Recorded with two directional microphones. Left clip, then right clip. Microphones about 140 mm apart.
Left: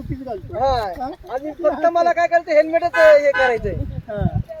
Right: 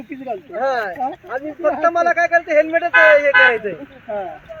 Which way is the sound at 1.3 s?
Centre (ahead or behind).